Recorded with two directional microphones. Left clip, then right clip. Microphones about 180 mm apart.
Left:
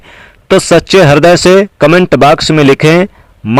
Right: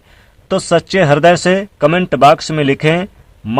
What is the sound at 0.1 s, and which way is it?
Speech, 35° left (ahead or behind).